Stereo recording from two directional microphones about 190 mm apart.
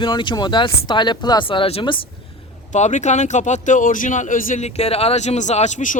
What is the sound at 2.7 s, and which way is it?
Speech, 40° left (ahead or behind).